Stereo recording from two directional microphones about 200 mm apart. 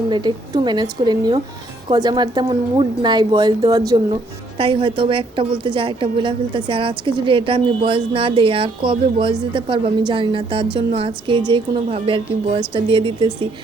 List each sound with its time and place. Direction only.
0.1 s a woman's voice: 20° right (ahead or behind)